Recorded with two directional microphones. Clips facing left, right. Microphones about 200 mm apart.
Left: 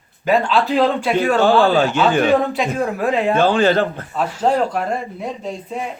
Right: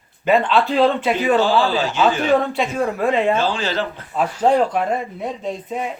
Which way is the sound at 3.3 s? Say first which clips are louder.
Left 6 dB; 55° left (ahead or behind).